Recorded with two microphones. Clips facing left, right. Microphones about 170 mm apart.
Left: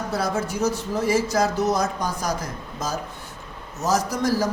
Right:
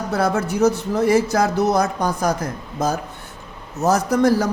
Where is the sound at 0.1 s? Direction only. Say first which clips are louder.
Right 6 dB; 65° right (ahead or behind).